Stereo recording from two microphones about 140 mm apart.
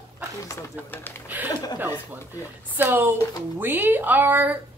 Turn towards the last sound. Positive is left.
turn(degrees=-15)  # may be behind; listen again after turning